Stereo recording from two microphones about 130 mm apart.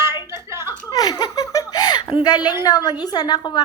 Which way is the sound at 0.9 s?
35° left (ahead or behind).